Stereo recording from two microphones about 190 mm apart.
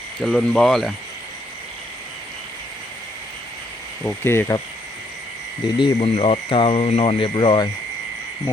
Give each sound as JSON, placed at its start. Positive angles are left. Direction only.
{"t": 0.3, "sound": "speech", "side_deg": 5}
{"t": 4.0, "sound": "speech", "side_deg": 10}
{"t": 5.6, "sound": "speech", "side_deg": 30}